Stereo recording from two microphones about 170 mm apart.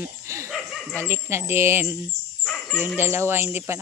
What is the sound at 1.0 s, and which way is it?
Speech, 15° right (ahead or behind).